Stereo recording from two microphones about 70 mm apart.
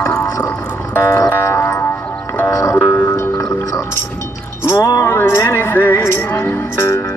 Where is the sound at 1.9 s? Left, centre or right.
Left.